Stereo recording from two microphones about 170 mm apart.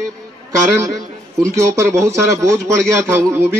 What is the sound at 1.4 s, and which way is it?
A man's voice, 15° right (ahead or behind).